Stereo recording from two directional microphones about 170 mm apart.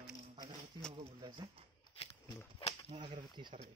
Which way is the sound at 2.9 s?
30° right (ahead or behind).